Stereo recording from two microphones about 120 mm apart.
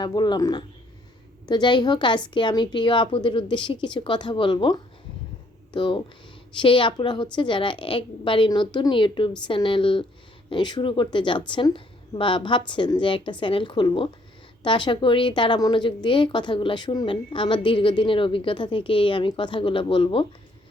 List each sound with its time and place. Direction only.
0.0 s a woman's voice: 40° left (ahead or behind)